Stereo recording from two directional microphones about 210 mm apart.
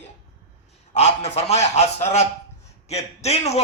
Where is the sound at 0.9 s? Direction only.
30° left (ahead or behind).